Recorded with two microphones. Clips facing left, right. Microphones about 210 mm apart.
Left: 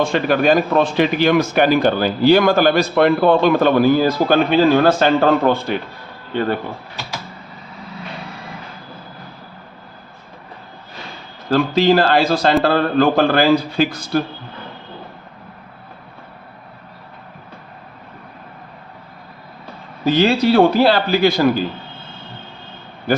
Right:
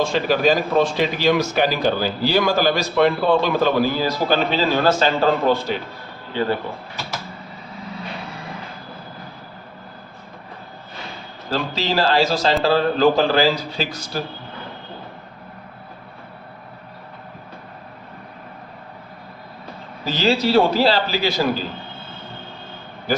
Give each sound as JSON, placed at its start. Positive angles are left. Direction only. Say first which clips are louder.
{"t": 0.0, "sound": "a man's voice", "louder": "left 2 dB", "side_deg": 55}
{"t": 11.5, "sound": "a man's voice", "louder": "left 8 dB", "side_deg": 55}
{"t": 20.1, "sound": "a man's voice", "louder": "left 5 dB", "side_deg": 55}